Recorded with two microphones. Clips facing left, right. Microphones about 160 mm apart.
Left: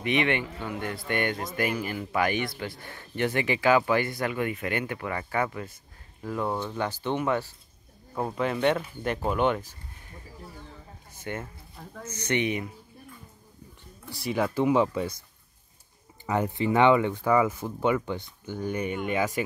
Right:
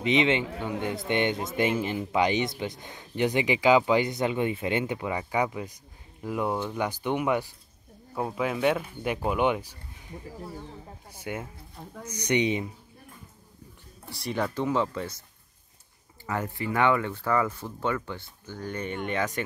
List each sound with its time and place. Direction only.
0.0 s speech: 20° right (ahead or behind)
11.1 s speech: 10° right (ahead or behind)
14.1 s speech: 5° left (ahead or behind)
16.3 s speech: 20° left (ahead or behind)